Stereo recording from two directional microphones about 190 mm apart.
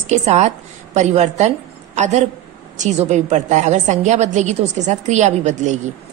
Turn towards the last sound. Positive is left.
turn(degrees=-40)  # may be behind; listen again after turning